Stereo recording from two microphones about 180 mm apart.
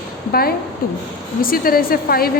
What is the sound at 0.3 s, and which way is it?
A woman's voice, 55° left (ahead or behind).